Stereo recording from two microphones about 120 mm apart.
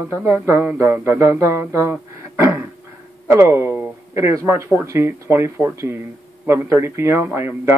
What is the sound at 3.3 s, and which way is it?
Speech, 20° right (ahead or behind).